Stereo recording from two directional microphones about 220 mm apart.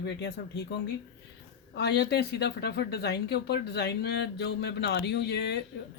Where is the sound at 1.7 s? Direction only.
50° left (ahead or behind).